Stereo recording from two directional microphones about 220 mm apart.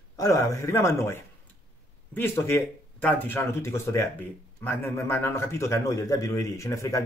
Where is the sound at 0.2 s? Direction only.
15° left (ahead or behind).